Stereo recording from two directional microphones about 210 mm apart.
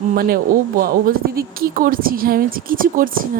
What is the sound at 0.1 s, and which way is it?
Speech, 45° right (ahead or behind).